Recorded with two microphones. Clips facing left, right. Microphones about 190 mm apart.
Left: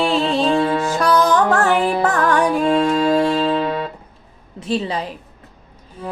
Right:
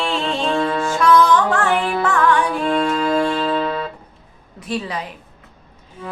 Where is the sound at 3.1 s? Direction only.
20° left (ahead or behind).